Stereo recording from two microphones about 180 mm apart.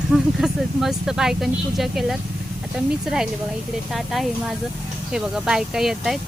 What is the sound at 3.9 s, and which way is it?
Speech, centre (ahead or behind).